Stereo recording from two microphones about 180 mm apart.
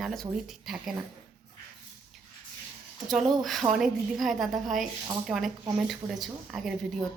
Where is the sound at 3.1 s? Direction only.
Centre (ahead or behind).